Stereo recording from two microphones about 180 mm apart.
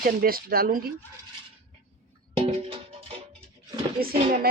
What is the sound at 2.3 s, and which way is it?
Music, 35° right (ahead or behind).